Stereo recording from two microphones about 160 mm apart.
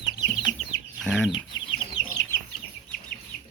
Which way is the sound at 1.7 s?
30° left (ahead or behind).